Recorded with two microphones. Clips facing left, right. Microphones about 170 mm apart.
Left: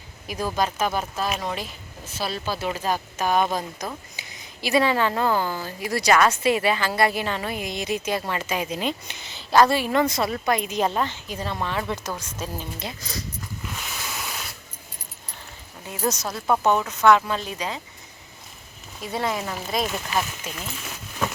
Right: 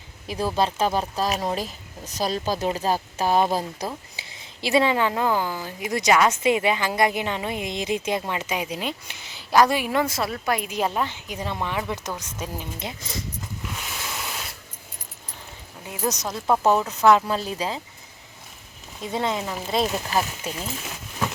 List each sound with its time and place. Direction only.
0.3 s speech: 30° right (ahead or behind)
16.0 s a woman's voice: 15° right (ahead or behind)
16.5 s speech: 5° right (ahead or behind)
16.9 s speech: 30° right (ahead or behind)
19.0 s speech: 20° right (ahead or behind)